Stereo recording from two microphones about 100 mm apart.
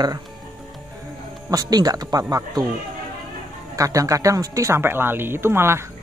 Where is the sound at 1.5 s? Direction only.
40° right (ahead or behind).